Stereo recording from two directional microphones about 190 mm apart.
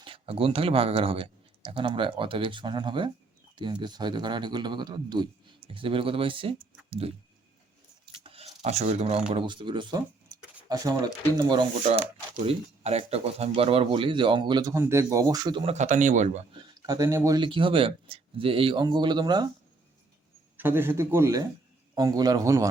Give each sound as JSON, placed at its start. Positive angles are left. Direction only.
{"t": 0.0, "sound": "speech", "side_deg": -30}
{"t": 8.1, "sound": "a sound", "side_deg": -30}
{"t": 9.3, "sound": "speech", "side_deg": -25}
{"t": 11.9, "sound": "speech", "side_deg": -35}
{"t": 16.6, "sound": "speech", "side_deg": -20}
{"t": 20.6, "sound": "a man's voice", "side_deg": -10}